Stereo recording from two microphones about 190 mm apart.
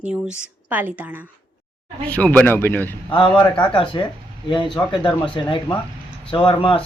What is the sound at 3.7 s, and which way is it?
Speech, 25° left (ahead or behind).